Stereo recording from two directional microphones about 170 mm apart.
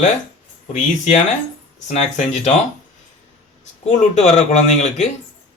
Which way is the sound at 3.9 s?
45° left (ahead or behind).